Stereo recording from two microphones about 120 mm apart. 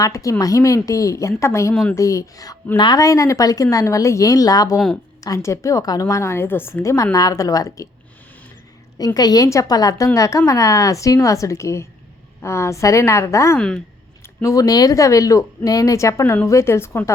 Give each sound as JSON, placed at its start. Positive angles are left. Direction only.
{"t": 0.0, "sound": "a woman's voice", "side_deg": 30}
{"t": 9.0, "sound": "a woman's voice", "side_deg": 35}
{"t": 13.6, "sound": "a woman's voice", "side_deg": 5}
{"t": 14.4, "sound": "a woman's voice", "side_deg": 30}